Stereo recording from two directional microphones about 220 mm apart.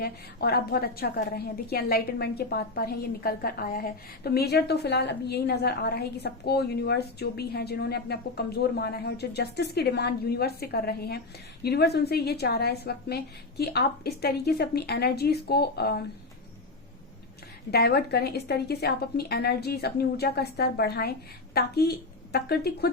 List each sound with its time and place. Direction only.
0.0 s a woman's voice: 45° left (ahead or behind)
17.7 s a woman's voice: 45° left (ahead or behind)